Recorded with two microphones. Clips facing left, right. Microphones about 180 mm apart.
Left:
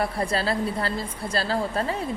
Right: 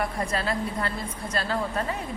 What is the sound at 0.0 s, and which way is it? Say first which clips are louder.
A woman's voice: left 3 dB; 30° left (ahead or behind).